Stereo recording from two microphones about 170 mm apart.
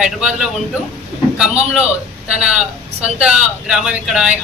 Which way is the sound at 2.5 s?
5° right (ahead or behind).